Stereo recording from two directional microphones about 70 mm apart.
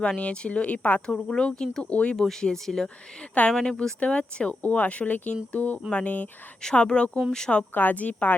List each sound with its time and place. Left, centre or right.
0.0 s speech: centre
2.1 s a woman's voice: centre
6.6 s speech: centre
7.7 s a woman's voice: left